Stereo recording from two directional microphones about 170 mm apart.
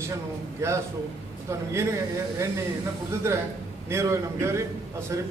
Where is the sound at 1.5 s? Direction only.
15° right (ahead or behind).